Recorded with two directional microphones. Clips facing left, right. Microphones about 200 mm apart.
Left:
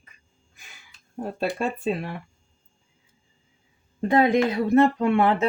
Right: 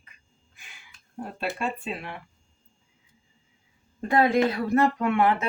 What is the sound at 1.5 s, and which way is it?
Speech, 40° left (ahead or behind).